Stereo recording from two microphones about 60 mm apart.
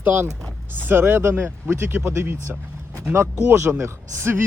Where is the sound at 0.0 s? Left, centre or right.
Right.